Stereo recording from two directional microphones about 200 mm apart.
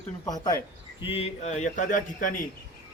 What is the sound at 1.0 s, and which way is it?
A man's voice, 30° left (ahead or behind).